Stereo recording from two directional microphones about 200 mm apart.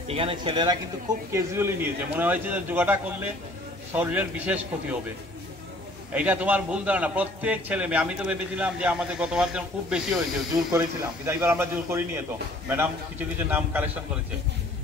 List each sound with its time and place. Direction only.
0.1 s a man's voice: 25° right (ahead or behind)
1.3 s a man's voice: 10° right (ahead or behind)
6.1 s a man's voice: 5° right (ahead or behind)
11.2 s a man's voice: 10° right (ahead or behind)
13.5 s a man's voice: 10° right (ahead or behind)